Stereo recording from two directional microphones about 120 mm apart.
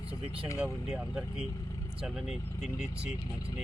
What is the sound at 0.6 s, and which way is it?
Speech, 10° right (ahead or behind).